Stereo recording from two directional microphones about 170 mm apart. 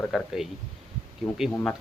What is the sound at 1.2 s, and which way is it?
Speech, 15° left (ahead or behind).